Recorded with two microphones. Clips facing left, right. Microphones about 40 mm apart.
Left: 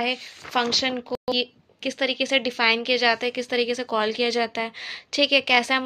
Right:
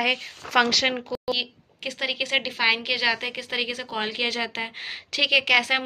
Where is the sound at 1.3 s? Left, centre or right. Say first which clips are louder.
Left 2 dB; centre.